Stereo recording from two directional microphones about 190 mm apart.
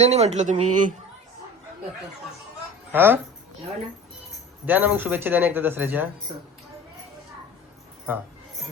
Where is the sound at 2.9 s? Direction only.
10° right (ahead or behind).